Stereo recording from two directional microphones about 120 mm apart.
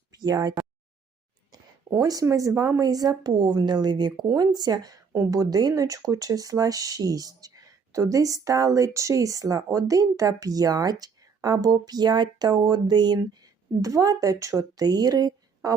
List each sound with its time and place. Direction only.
0.1 s speech: 35° right (ahead or behind)